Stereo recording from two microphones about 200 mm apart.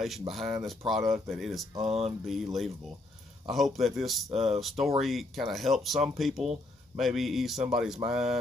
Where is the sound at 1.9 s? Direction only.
30° right (ahead or behind).